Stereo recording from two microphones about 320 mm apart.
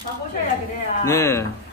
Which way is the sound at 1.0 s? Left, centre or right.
Centre.